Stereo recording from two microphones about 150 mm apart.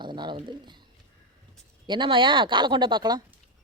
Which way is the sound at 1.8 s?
30° right (ahead or behind).